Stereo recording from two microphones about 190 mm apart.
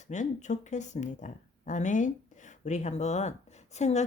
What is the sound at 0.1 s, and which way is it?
A woman's voice, 40° left (ahead or behind).